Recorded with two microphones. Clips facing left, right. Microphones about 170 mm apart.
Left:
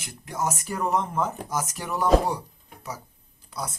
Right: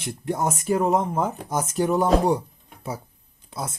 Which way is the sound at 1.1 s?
50° right (ahead or behind).